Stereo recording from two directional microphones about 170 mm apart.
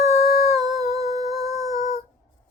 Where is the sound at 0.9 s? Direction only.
20° right (ahead or behind).